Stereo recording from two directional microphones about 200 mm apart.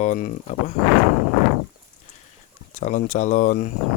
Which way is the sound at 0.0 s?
40° left (ahead or behind).